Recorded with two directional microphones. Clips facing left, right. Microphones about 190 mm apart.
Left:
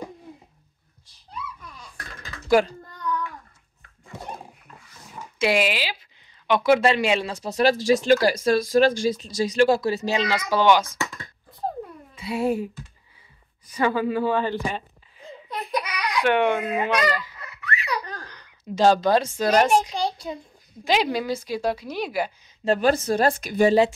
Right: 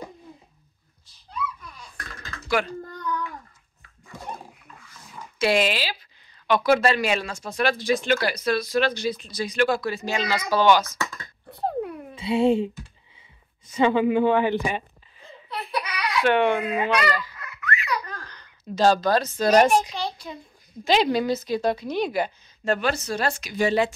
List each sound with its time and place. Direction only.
2.4 s speech: 40° left (ahead or behind)
5.4 s a woman's voice: 10° left (ahead or behind)
10.8 s speech: 30° left (ahead or behind)
11.5 s a sound: 70° right (ahead or behind)
12.2 s speech: 25° right (ahead or behind)
15.5 s a sound: 15° left (ahead or behind)
16.9 s a woman's voice: 10° left (ahead or behind)
17.4 s laughter: 35° left (ahead or behind)
18.2 s a sound: 15° left (ahead or behind)
19.7 s speech: 30° left (ahead or behind)
20.8 s a woman's voice: 10° left (ahead or behind)
22.7 s speech: 35° left (ahead or behind); by 23.7 s 55° left (ahead or behind)